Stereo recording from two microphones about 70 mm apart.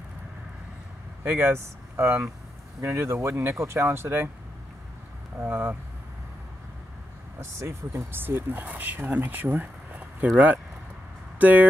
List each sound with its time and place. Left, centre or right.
1.2 s speech: right
2.8 s speech: right
5.5 s speech: right
7.9 s speech: right